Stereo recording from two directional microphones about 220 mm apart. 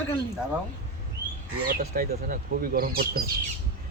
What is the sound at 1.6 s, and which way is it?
Speech, 40° right (ahead or behind).